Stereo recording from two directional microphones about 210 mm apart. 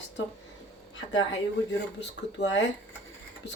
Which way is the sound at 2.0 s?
55° left (ahead or behind).